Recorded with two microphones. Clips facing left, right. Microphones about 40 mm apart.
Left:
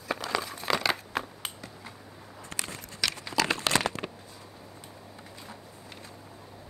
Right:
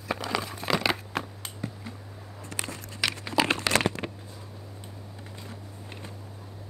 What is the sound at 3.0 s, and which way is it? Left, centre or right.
Crumpling, centre.